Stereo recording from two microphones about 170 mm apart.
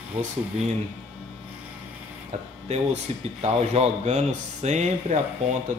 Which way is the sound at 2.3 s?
40° right (ahead or behind).